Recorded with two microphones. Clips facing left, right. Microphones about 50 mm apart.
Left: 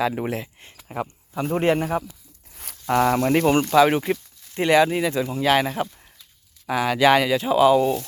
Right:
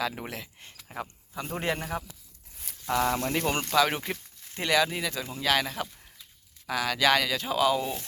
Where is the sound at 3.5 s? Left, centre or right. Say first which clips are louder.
Left 8 dB; left.